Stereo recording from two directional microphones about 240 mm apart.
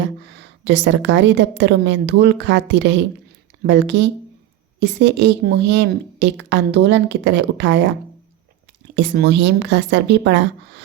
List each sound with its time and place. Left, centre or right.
0.0 s a woman's voice: right
9.0 s a woman's voice: right